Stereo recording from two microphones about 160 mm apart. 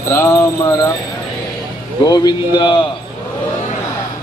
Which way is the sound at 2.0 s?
25° left (ahead or behind).